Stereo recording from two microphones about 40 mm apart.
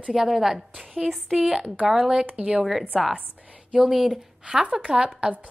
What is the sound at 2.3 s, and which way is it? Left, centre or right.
Speech, right.